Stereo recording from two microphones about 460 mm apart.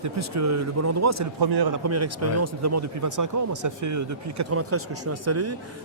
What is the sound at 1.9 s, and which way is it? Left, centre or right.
Speech, right.